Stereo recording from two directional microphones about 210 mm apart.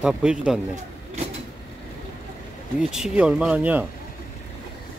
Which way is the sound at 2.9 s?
5° right (ahead or behind).